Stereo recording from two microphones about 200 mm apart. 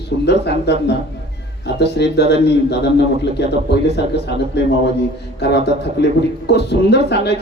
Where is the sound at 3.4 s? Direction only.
60° left (ahead or behind).